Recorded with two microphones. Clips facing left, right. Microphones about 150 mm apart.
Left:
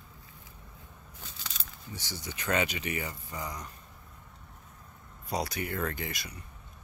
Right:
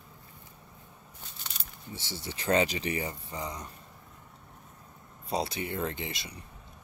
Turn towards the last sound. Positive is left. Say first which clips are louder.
# even
turn(degrees=-25)  # may be behind; listen again after turning